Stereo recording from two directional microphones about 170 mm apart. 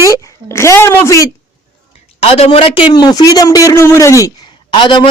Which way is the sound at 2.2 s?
35° left (ahead or behind).